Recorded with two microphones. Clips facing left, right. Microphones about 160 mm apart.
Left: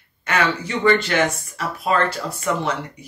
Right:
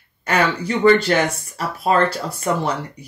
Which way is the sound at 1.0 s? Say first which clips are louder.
Right 2 dB; 35° right (ahead or behind).